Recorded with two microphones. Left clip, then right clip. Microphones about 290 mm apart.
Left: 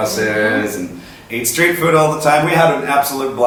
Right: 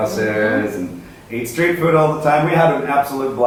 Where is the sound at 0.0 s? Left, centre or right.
Centre.